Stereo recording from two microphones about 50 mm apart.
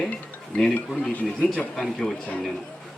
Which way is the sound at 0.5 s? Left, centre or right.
Left.